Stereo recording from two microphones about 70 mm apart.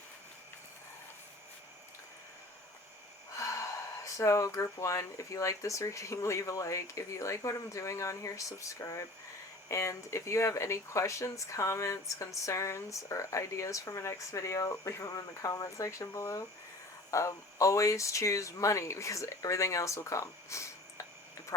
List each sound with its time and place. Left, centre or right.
3.3 s speech: left